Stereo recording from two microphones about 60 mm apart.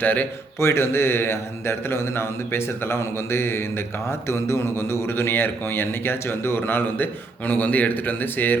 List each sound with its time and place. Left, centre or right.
0.0 s a man's voice: left
0.6 s a man's voice: left